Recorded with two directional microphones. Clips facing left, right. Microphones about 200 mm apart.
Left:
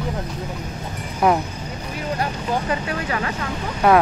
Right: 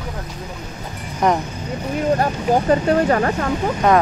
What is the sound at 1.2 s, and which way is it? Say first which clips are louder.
Speech: even; 5° left (ahead or behind).